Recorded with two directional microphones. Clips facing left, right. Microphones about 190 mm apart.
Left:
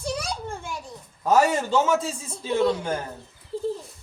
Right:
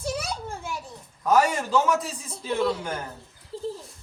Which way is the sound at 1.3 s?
25° left (ahead or behind).